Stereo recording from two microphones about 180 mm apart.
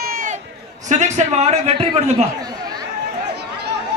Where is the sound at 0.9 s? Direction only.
40° right (ahead or behind).